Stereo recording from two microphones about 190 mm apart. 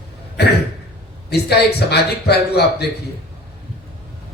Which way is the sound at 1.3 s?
60° left (ahead or behind).